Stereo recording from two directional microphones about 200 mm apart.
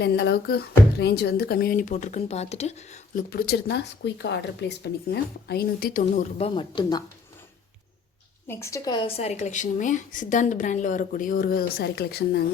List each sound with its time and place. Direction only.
0.0 s speech: 55° left (ahead or behind); by 3.2 s 35° left (ahead or behind)
3.2 s speech: 50° left (ahead or behind)
6.6 s speech: 20° left (ahead or behind)
8.4 s a woman's voice: 15° left (ahead or behind); by 12.4 s 55° left (ahead or behind)